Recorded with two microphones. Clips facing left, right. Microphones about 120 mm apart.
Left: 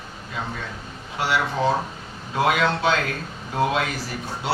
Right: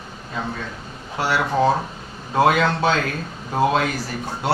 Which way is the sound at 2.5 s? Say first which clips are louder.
Right 1 dB; 40° right (ahead or behind).